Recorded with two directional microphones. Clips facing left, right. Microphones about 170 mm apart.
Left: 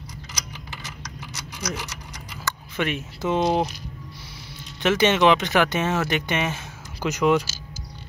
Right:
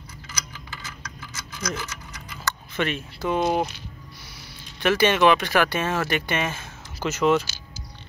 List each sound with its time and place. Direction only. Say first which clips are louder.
1.5 s speech: right 1 dB; 15° left (ahead or behind)
4.8 s speech: even; 20° left (ahead or behind)